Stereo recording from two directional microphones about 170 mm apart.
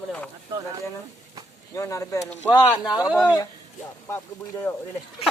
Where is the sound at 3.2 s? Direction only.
20° left (ahead or behind).